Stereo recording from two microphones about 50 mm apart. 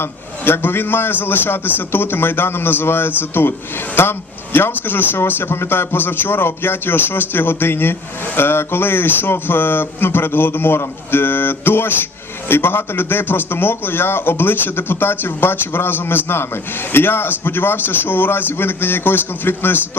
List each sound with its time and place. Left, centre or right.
0.0 s a man's voice: left
5.2 s a man's voice: left